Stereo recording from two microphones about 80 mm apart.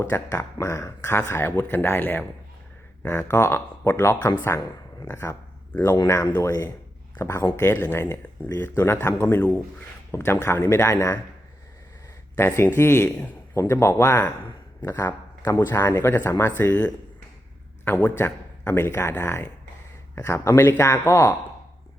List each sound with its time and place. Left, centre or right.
0.0 s a man's voice: left
12.4 s a man's voice: left